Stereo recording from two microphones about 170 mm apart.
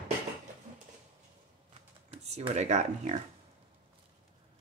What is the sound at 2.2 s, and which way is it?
Speech, 40° right (ahead or behind).